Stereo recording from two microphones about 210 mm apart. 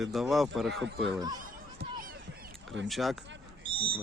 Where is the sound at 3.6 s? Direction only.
25° right (ahead or behind).